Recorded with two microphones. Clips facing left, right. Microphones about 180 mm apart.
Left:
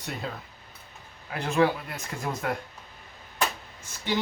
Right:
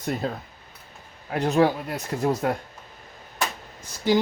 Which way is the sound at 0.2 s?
40° right (ahead or behind).